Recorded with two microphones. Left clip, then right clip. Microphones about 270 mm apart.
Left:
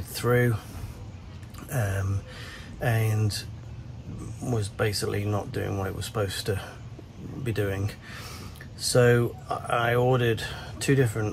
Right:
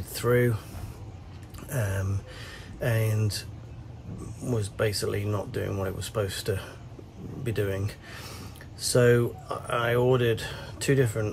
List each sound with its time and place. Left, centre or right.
0.1 s speech: centre
1.7 s speech: centre
4.6 s speech: centre
8.9 s speech: centre